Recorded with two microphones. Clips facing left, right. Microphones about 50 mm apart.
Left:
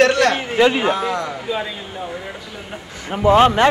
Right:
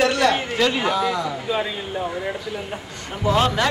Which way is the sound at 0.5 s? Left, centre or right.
Left.